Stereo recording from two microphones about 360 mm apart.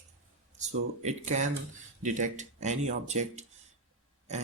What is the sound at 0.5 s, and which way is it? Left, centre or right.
Speech, centre.